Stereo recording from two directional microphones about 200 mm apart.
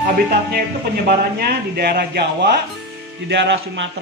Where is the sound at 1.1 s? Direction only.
50° right (ahead or behind).